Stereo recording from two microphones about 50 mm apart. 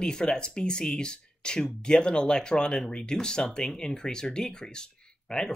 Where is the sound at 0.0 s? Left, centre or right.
Centre.